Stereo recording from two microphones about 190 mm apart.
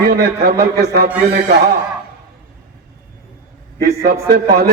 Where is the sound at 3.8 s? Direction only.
50° right (ahead or behind).